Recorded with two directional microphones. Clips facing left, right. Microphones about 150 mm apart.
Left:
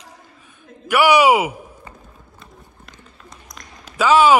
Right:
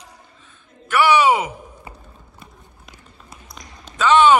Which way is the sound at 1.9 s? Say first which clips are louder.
Right 1 dB; 10° right (ahead or behind).